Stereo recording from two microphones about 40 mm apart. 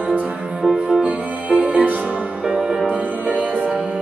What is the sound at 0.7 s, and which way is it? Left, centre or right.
Music, right.